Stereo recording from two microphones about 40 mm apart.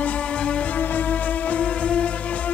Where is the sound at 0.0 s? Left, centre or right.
Left.